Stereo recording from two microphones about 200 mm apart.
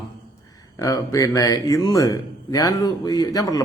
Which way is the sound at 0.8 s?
15° left (ahead or behind).